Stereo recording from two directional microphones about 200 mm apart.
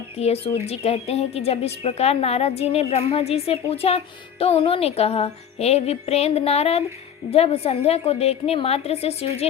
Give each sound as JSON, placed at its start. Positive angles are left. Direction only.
{"t": 0.2, "sound": "a woman's voice", "side_deg": 30}